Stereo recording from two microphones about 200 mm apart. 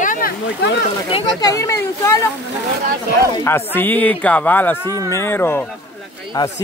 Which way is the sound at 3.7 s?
10° left (ahead or behind).